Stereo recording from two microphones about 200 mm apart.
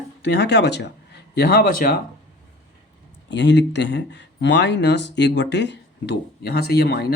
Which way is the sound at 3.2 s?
60° left (ahead or behind).